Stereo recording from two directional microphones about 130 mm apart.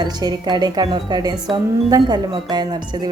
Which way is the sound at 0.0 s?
30° right (ahead or behind).